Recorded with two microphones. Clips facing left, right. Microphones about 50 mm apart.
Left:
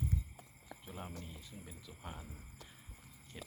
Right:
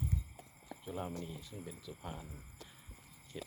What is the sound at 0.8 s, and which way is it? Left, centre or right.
Speech, centre.